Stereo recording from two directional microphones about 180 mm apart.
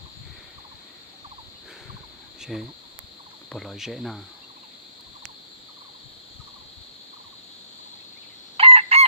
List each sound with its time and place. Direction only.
2.4 s speech: 5° right (ahead or behind)
8.5 s chicken: 35° right (ahead or behind)